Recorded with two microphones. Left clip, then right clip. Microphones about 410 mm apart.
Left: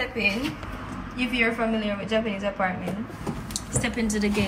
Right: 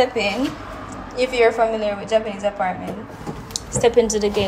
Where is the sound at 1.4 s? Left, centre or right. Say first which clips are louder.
Right 8 dB; centre.